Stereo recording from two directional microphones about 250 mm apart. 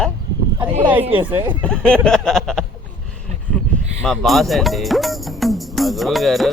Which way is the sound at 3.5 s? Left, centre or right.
Centre.